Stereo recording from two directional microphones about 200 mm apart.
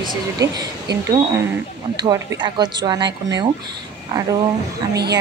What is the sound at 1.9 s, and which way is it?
Speech, 20° right (ahead or behind).